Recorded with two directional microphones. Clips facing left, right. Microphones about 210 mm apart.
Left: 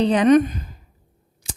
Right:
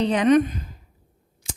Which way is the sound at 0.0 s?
35° left (ahead or behind).